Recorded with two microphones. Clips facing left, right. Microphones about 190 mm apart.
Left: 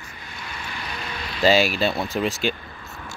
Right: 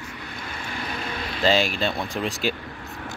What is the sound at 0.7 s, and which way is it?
Vehicle, 50° right (ahead or behind).